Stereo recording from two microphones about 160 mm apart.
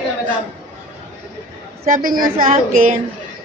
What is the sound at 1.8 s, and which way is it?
Speech, 60° right (ahead or behind).